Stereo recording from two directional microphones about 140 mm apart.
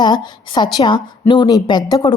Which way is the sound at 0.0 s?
30° left (ahead or behind).